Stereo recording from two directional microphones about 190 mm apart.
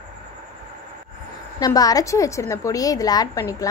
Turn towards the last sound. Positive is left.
turn(degrees=15)  # may be behind; listen again after turning